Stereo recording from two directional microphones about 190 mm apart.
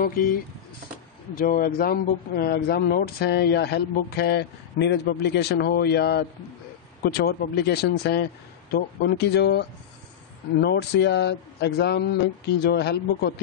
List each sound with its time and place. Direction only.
0.0 s speech: 50° left (ahead or behind)